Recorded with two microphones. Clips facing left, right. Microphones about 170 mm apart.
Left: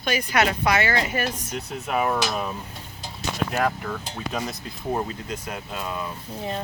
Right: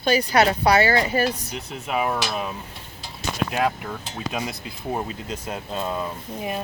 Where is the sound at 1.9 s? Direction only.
5° right (ahead or behind).